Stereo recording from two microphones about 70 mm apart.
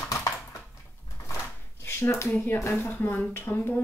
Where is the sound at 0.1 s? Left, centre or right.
Left.